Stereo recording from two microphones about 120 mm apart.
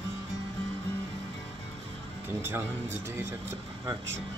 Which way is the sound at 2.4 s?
20° right (ahead or behind).